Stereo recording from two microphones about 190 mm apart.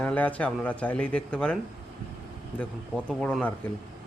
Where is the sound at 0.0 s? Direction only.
5° left (ahead or behind).